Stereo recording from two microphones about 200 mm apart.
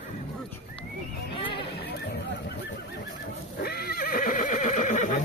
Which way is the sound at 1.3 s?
25° left (ahead or behind).